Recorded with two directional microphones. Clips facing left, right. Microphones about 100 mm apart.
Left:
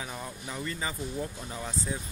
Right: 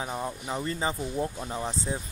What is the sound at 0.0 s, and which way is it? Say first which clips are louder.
Speech: right 6 dB; 30° right (ahead or behind).